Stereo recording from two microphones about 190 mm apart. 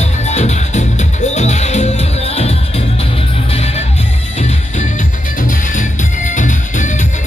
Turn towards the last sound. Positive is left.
turn(degrees=40)  # may be behind; listen again after turning